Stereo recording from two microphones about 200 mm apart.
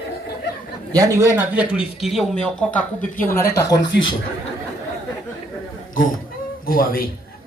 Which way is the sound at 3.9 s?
60° left (ahead or behind).